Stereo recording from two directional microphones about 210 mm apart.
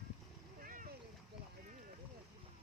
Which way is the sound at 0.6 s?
40° right (ahead or behind).